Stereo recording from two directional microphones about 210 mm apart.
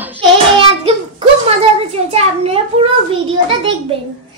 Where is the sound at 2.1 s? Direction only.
30° right (ahead or behind).